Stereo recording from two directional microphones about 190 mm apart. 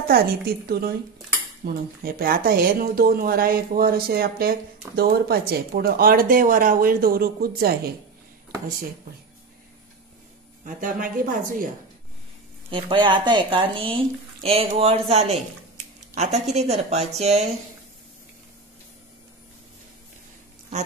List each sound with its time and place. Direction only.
0.1 s speech: 55° right (ahead or behind)
10.6 s speech: 45° right (ahead or behind)
12.6 s a woman's voice: 25° right (ahead or behind)